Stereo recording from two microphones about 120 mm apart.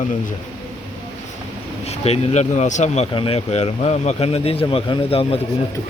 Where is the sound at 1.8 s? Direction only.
60° left (ahead or behind).